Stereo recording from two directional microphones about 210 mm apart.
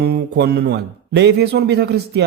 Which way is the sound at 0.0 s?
50° right (ahead or behind).